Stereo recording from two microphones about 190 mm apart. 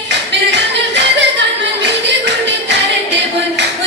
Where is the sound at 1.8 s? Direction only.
65° right (ahead or behind).